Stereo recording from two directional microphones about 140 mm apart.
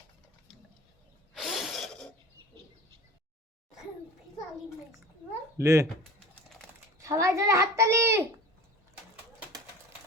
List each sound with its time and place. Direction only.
1.3 s a sound: centre (ahead or behind)
5.5 s a child's voice: 20° right (ahead or behind)
7.0 s a child's voice: 20° right (ahead or behind)